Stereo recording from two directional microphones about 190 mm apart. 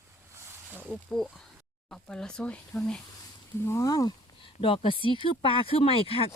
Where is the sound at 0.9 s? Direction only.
Centre (ahead or behind).